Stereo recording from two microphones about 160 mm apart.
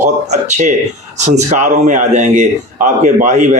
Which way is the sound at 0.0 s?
45° right (ahead or behind).